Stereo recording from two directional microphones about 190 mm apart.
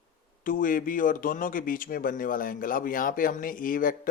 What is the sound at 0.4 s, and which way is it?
Speech, 45° left (ahead or behind).